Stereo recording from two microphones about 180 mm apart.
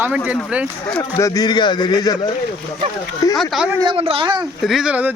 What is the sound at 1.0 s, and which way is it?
Speech, 15° left (ahead or behind).